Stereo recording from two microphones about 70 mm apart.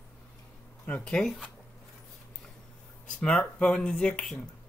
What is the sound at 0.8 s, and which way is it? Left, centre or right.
Speech, centre.